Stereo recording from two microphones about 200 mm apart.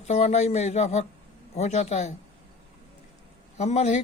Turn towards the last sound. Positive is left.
turn(degrees=35)  # may be behind; listen again after turning